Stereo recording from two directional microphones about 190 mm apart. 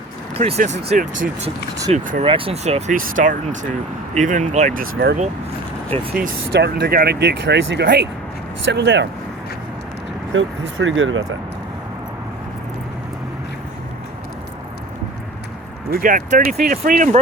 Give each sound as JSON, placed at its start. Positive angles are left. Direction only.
{"t": 0.3, "sound": "speech", "side_deg": -35}
{"t": 6.2, "sound": "speech", "side_deg": -60}
{"t": 10.3, "sound": "speech", "side_deg": -85}
{"t": 16.0, "sound": "speech", "side_deg": -45}